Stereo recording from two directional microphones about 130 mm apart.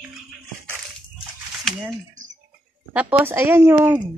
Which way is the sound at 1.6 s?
Centre (ahead or behind).